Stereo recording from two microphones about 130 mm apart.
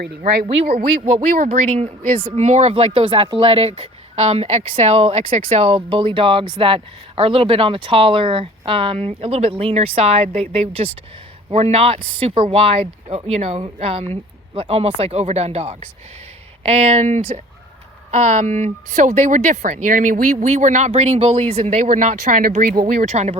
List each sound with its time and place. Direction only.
0.4 s speech: 45° right (ahead or behind); by 2.8 s 60° right (ahead or behind)
2.8 s speech: 45° right (ahead or behind)